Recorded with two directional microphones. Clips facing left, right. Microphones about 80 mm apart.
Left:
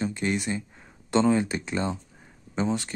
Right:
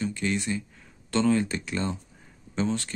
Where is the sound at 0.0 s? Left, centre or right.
Left.